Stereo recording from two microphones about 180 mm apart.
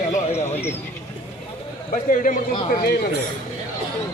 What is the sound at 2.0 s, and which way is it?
Speech, 50° left (ahead or behind).